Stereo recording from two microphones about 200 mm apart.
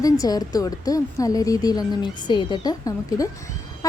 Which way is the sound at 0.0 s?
20° left (ahead or behind).